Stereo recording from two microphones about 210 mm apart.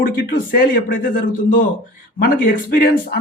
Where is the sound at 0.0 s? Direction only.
45° left (ahead or behind).